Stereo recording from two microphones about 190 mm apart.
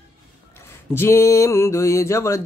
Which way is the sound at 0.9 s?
15° left (ahead or behind).